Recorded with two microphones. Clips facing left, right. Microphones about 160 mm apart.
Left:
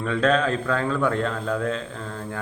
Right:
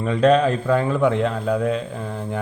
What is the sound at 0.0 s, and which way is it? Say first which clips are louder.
Speech: right 5 dB; 10° right (ahead or behind).